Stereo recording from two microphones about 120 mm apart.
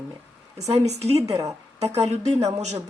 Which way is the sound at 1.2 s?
30° right (ahead or behind).